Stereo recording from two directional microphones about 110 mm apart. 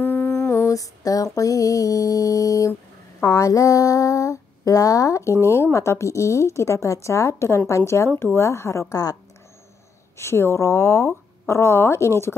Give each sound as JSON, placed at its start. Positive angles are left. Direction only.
{"t": 0.0, "sound": "music", "side_deg": 20}
{"t": 3.2, "sound": "female singing", "side_deg": 30}
{"t": 5.4, "sound": "speech", "side_deg": 25}
{"t": 10.1, "sound": "speech", "side_deg": 25}